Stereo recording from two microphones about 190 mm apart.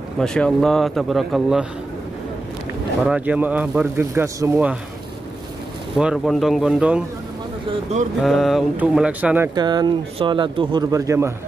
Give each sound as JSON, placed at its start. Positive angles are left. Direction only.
{"t": 0.2, "sound": "a man's voice", "side_deg": 5}
{"t": 3.0, "sound": "speech", "side_deg": -5}
{"t": 5.9, "sound": "a man's voice", "side_deg": 0}
{"t": 8.2, "sound": "a man's voice", "side_deg": 0}
{"t": 9.6, "sound": "speech", "side_deg": -20}